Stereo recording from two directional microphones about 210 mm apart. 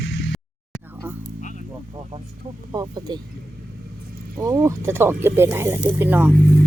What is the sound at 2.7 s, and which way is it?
Speech, 20° right (ahead or behind).